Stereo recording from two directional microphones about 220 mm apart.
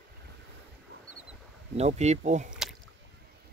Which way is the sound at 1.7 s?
30° right (ahead or behind).